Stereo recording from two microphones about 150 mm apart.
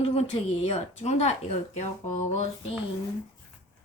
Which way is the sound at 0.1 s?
45° left (ahead or behind).